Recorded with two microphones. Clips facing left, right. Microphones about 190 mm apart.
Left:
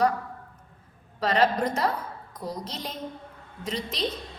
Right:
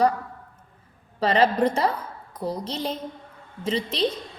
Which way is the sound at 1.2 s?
30° right (ahead or behind).